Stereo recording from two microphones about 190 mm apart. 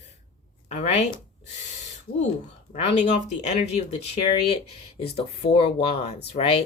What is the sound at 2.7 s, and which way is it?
Speech, 35° left (ahead or behind).